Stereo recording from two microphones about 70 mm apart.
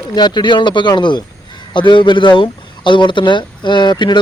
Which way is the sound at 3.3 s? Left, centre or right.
Left.